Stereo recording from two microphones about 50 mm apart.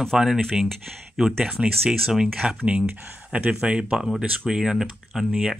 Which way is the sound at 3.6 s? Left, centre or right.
Centre.